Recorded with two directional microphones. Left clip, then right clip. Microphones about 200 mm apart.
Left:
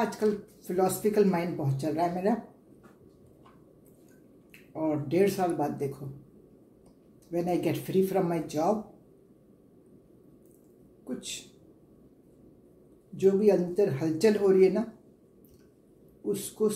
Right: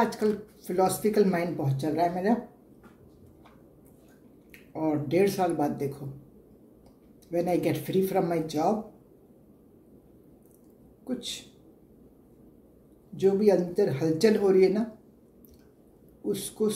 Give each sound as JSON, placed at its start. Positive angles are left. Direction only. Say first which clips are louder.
{"t": 0.0, "sound": "speech", "louder": "right 2 dB", "side_deg": -10}
{"t": 4.5, "sound": "speech", "louder": "right 1 dB", "side_deg": -10}
{"t": 7.2, "sound": "speech", "louder": "right 2 dB", "side_deg": -10}
{"t": 11.1, "sound": "speech", "louder": "right 4 dB", "side_deg": -10}
{"t": 13.1, "sound": "speech", "louder": "right 1 dB", "side_deg": -10}
{"t": 16.6, "sound": "speech", "louder": "even", "side_deg": -10}